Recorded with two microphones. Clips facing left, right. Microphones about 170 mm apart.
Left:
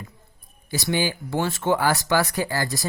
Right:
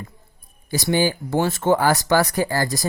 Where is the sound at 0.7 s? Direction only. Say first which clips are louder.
Right 4 dB; 40° right (ahead or behind).